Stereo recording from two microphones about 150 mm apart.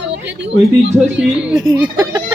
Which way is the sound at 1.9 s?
25° right (ahead or behind).